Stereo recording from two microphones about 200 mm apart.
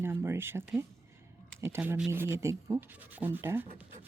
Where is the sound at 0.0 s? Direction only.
10° right (ahead or behind).